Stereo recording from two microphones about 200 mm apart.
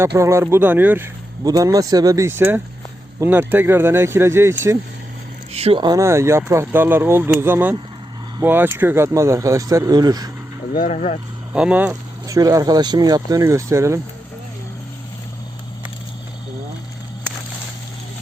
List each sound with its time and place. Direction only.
0.2 s speech: 15° right (ahead or behind)
5.5 s speech: 25° right (ahead or behind)
10.8 s speech: 35° left (ahead or behind)
11.5 s speech: 5° right (ahead or behind)